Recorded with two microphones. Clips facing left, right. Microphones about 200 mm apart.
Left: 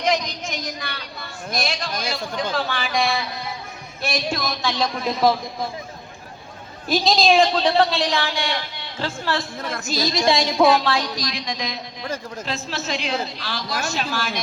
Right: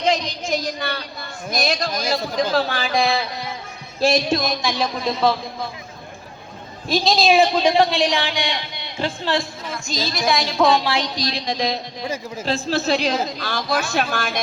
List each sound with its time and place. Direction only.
0.0 s a man's voice: 30° right (ahead or behind)
4.0 s a man's voice: 25° right (ahead or behind)
6.8 s a woman's voice: centre (ahead or behind); by 9.5 s 15° right (ahead or behind)
9.8 s a woman's voice: 5° left (ahead or behind)
10.1 s a woman's voice: 25° left (ahead or behind)
10.6 s a woman's voice: 5° left (ahead or behind)
10.9 s a man's voice: 30° right (ahead or behind)
12.0 s a woman's voice: 10° right (ahead or behind)
12.5 s a woman's voice: 35° right (ahead or behind); by 14.4 s 50° right (ahead or behind)